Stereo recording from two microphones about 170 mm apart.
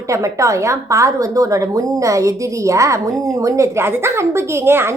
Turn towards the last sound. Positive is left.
turn(degrees=-15)  # may be behind; listen again after turning